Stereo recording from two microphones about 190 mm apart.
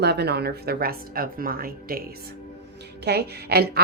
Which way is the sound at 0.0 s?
60° right (ahead or behind).